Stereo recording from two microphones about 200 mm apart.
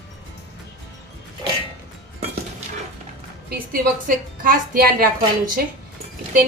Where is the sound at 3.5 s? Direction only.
45° right (ahead or behind).